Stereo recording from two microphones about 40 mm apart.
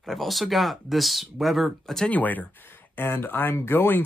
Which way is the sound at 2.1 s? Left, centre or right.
Left.